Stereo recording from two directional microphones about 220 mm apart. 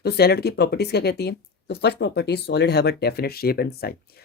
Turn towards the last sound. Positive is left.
turn(degrees=45)  # may be behind; listen again after turning